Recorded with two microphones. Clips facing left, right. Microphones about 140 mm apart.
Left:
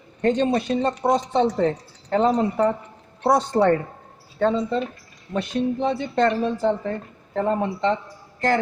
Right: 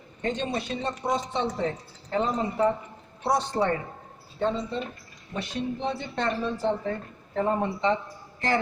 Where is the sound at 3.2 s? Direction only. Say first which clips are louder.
Left 7 dB; 55° left (ahead or behind).